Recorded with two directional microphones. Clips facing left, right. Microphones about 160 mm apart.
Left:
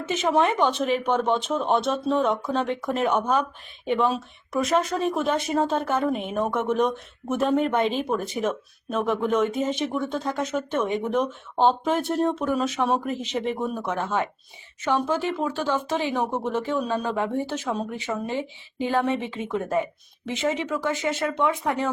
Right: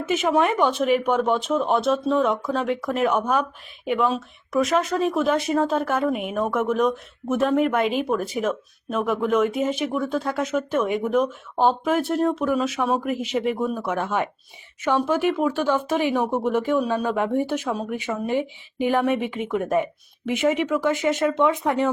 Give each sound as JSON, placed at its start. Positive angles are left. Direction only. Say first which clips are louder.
{"t": 0.1, "sound": "speech", "louder": "right 1 dB", "side_deg": -10}